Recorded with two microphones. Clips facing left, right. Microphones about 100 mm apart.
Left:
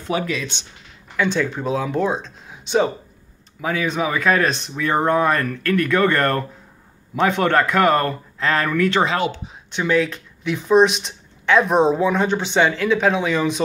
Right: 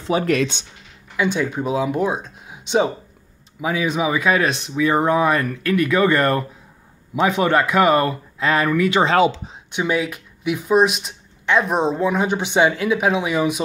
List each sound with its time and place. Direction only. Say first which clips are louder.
0.2 s speech: right 6 dB; 60° right (ahead or behind)
1.1 s speech: even; 10° right (ahead or behind)